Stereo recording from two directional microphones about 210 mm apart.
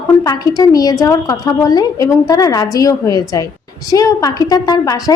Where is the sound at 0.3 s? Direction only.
15° left (ahead or behind).